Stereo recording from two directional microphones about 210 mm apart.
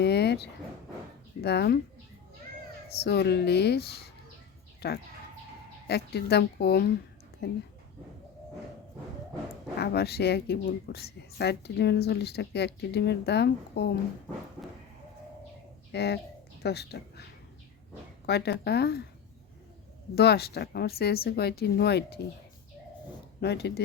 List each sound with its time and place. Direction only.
0.0 s a sound: 50° left (ahead or behind)
1.4 s speech: 50° left (ahead or behind)
3.0 s speech: 50° left (ahead or behind)
9.7 s speech: 50° left (ahead or behind)
15.9 s speech: 50° left (ahead or behind)
18.3 s speech: 50° left (ahead or behind)
20.1 s speech: 50° left (ahead or behind)
23.4 s speech: 50° left (ahead or behind)